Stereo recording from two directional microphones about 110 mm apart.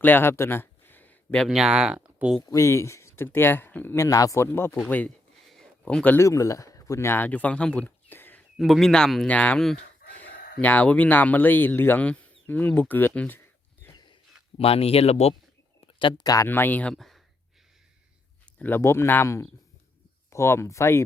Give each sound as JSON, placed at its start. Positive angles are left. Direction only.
{"t": 0.0, "sound": "a sound", "side_deg": 20}
{"t": 1.5, "sound": "speech", "side_deg": -5}
{"t": 2.5, "sound": "speech", "side_deg": 30}
{"t": 5.5, "sound": "a sound", "side_deg": 5}
{"t": 6.1, "sound": "speech", "side_deg": 30}
{"t": 8.5, "sound": "a man's voice", "side_deg": 0}
{"t": 14.6, "sound": "speech", "side_deg": 65}
{"t": 15.9, "sound": "speech", "side_deg": 50}
{"t": 16.5, "sound": "speech", "side_deg": 15}
{"t": 16.9, "sound": "speech", "side_deg": 5}
{"t": 18.6, "sound": "speech", "side_deg": 20}